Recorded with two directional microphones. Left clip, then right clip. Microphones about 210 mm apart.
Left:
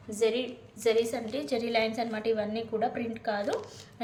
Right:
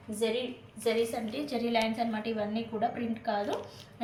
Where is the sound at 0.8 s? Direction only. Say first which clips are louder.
Left 3 dB; 55° left (ahead or behind).